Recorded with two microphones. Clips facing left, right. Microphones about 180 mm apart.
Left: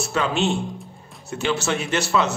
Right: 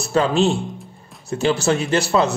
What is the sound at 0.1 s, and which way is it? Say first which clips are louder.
A man's voice: right 6 dB; 35° right (ahead or behind).